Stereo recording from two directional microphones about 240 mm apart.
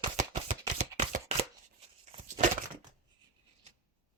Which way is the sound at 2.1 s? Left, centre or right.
Right.